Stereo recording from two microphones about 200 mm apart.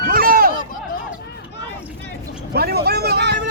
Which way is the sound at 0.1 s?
45° right (ahead or behind).